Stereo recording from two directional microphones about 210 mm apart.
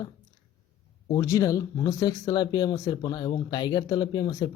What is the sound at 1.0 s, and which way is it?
Speech, 15° left (ahead or behind).